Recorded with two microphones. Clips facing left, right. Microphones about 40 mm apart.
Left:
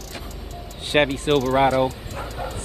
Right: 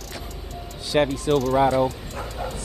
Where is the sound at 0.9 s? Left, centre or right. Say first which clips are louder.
Left 2 dB; left.